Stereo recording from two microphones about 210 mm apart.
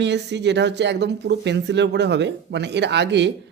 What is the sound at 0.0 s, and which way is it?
Speech, 55° right (ahead or behind).